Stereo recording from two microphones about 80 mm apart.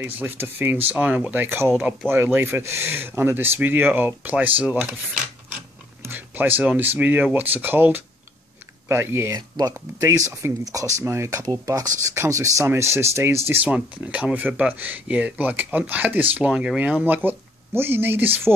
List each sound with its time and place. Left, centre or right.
0.0 s speech: right
6.0 s a sound: right
6.7 s speech: right
9.3 s speech: right
13.7 s speech: centre